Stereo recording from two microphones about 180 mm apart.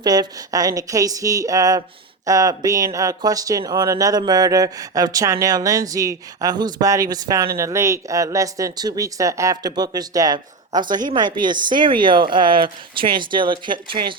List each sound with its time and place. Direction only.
0.0 s speech: 20° right (ahead or behind)